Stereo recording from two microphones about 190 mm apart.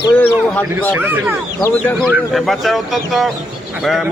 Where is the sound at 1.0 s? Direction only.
10° right (ahead or behind).